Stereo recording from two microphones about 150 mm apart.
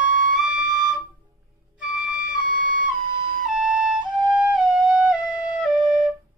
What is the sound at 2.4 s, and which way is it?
Flute, 65° right (ahead or behind).